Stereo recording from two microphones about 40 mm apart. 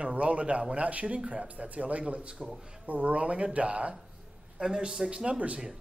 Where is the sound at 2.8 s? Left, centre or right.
Right.